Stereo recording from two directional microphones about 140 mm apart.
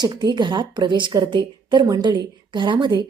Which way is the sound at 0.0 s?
30° right (ahead or behind).